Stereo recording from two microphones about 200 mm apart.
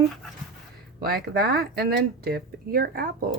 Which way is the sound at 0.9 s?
50° right (ahead or behind).